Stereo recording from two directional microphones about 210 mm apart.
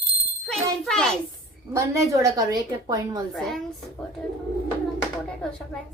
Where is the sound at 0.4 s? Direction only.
5° left (ahead or behind).